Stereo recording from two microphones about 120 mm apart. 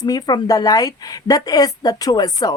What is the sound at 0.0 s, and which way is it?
A woman's voice, 35° left (ahead or behind).